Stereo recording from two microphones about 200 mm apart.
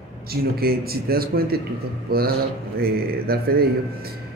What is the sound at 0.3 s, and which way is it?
Speech, 50° right (ahead or behind).